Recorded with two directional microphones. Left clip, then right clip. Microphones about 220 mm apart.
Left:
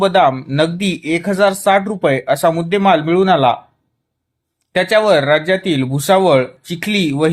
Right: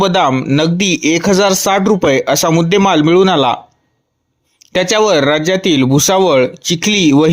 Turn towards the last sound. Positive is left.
turn(degrees=-40)  # may be behind; listen again after turning